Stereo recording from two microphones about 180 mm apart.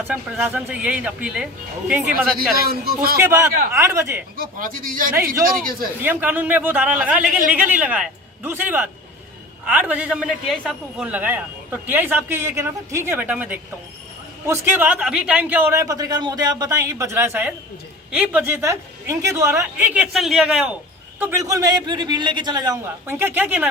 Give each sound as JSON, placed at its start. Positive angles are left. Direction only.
{"t": 0.1, "sound": "a man's voice", "side_deg": -10}
{"t": 3.2, "sound": "a man's voice", "side_deg": -15}
{"t": 4.4, "sound": "speech", "side_deg": -50}
{"t": 6.0, "sound": "a man's voice", "side_deg": -10}
{"t": 21.2, "sound": "a man's voice", "side_deg": -15}